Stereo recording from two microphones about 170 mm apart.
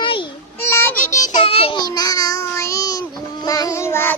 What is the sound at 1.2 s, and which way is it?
Child singing, 25° left (ahead or behind).